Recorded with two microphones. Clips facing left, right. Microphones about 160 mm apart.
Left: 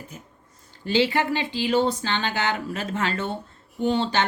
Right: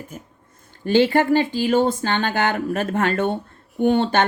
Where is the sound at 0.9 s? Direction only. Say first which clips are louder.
Right 6 dB; 50° right (ahead or behind).